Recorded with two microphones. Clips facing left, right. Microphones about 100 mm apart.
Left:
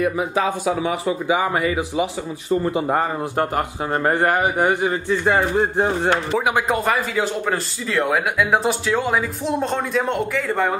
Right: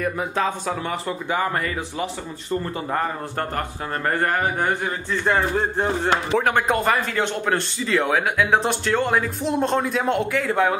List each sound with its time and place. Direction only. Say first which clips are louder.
0.0 s a man's voice: left 3 dB; 5° left (ahead or behind)